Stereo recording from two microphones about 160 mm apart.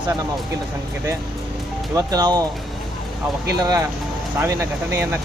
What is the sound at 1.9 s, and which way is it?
Speech, 25° right (ahead or behind).